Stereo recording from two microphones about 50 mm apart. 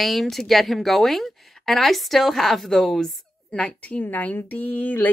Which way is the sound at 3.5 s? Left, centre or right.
Left.